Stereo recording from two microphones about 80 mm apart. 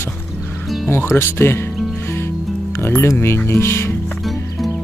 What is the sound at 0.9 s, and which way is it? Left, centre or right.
Speech, left.